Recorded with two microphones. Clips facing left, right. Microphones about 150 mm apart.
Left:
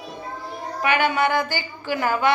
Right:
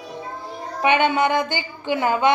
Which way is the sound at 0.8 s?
25° right (ahead or behind).